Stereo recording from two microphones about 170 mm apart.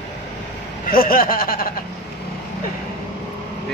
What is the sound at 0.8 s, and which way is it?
Speech, 60° left (ahead or behind).